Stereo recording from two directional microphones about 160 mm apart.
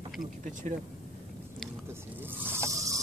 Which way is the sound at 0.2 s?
55° right (ahead or behind).